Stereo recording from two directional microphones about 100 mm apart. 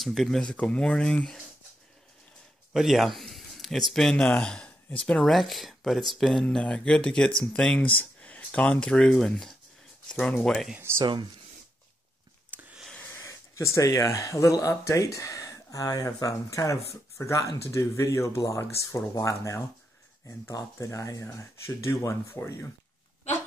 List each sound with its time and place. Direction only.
0.0 s speech: centre (ahead or behind)
2.7 s speech: centre (ahead or behind)
10.8 s speech: 25° right (ahead or behind)
12.5 s a sound: 20° right (ahead or behind)
13.2 s speech: 30° left (ahead or behind)
20.8 s speech: 35° left (ahead or behind)